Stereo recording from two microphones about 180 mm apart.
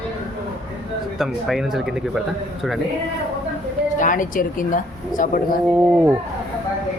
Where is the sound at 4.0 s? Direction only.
45° left (ahead or behind).